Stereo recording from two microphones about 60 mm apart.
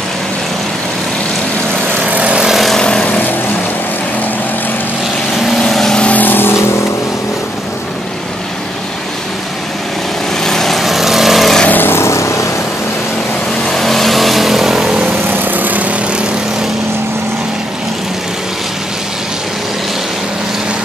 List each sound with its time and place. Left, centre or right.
2.0 s vehicle: right
2.5 s vehicle: centre
2.8 s vehicle: centre
5.6 s vehicle: centre
6.0 s vehicle: left
10.4 s vehicle: centre
11.6 s vehicle: left
13.7 s vehicle: centre
15.2 s vehicle: right